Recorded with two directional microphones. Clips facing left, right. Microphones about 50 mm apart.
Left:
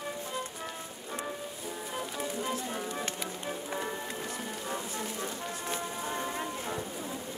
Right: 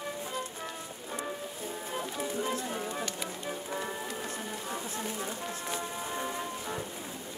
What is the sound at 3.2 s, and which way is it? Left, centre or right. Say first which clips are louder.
Music: even; centre.